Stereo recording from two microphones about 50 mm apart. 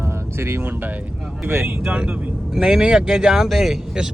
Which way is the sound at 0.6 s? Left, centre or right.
Right.